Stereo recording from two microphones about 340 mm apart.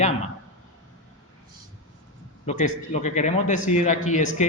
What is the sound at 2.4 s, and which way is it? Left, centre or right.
A man's voice, centre.